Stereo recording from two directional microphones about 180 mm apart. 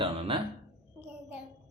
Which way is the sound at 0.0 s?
30° right (ahead or behind).